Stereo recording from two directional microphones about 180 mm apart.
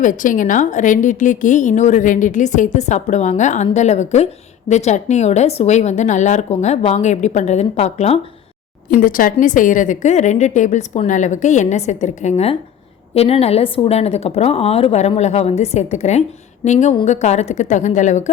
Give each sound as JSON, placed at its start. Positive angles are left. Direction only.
{"t": 0.0, "sound": "a woman's voice", "side_deg": 45}
{"t": 8.9, "sound": "a woman's voice", "side_deg": 50}